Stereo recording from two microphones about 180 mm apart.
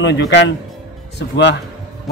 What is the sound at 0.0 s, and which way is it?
A man's voice, 75° left (ahead or behind).